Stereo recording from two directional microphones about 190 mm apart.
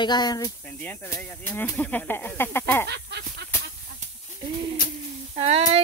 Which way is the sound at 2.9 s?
60° right (ahead or behind).